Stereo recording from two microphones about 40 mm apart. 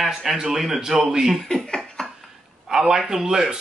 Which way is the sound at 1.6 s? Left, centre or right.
Left.